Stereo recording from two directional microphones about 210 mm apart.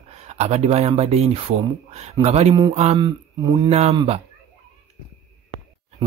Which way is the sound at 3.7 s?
30° right (ahead or behind).